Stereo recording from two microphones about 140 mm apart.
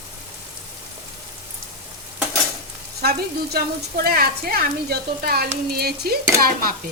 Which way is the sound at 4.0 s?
90° right.